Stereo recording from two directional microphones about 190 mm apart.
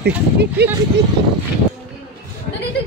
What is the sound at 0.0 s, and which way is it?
Speech, 60° right (ahead or behind).